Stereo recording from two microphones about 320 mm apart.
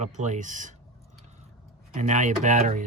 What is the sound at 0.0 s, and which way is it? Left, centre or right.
Speech, right.